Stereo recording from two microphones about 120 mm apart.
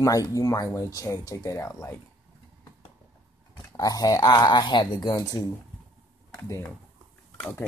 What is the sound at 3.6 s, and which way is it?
Speech, 30° left (ahead or behind).